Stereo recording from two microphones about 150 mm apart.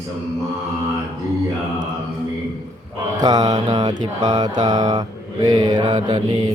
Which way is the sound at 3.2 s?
25° right (ahead or behind).